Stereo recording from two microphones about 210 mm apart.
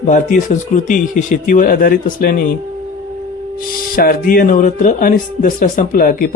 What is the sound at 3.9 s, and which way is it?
Speech, 45° left (ahead or behind).